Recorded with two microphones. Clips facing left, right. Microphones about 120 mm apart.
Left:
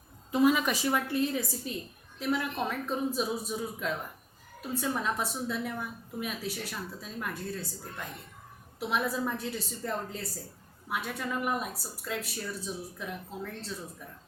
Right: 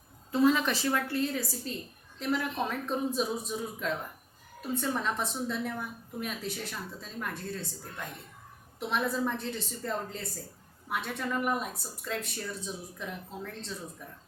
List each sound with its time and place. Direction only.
0.3 s a woman's voice: 15° left (ahead or behind)
2.1 s a woman's voice: 5° left (ahead or behind)